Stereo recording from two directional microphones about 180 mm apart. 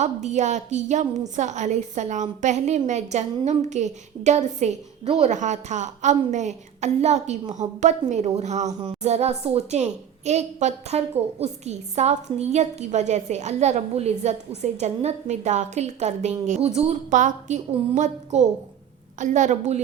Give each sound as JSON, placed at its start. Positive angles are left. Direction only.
{"t": 0.0, "sound": "a woman's voice", "side_deg": -40}